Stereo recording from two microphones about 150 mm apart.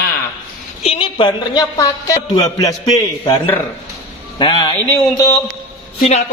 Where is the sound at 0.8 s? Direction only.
35° left (ahead or behind).